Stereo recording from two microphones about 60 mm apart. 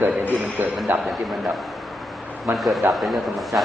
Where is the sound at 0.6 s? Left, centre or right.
Right.